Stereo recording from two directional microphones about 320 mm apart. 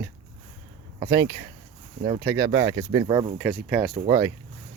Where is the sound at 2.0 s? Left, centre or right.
Right.